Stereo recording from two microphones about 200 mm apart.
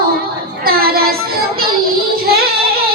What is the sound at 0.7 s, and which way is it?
Child singing, 50° right (ahead or behind).